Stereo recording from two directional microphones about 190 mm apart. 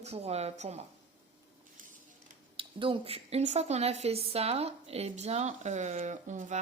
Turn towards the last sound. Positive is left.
turn(degrees=-40)  # may be behind; listen again after turning